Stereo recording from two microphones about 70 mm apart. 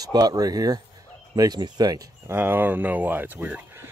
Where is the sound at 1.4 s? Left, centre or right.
Right.